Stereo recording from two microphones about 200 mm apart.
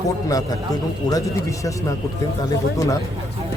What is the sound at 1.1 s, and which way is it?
Speech, 15° left (ahead or behind).